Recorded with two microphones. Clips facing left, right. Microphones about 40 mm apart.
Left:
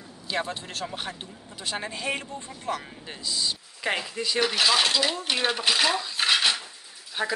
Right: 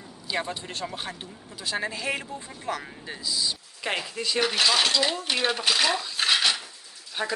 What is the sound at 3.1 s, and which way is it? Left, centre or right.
Speech, centre.